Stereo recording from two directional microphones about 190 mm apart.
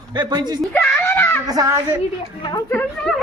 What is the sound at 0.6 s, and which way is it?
Screaming, 5° left (ahead or behind).